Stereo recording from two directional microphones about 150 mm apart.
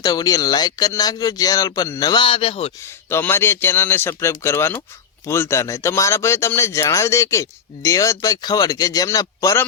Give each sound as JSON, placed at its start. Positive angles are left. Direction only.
{"t": 0.0, "sound": "speech", "side_deg": 25}
{"t": 2.8, "sound": "a man's voice", "side_deg": 15}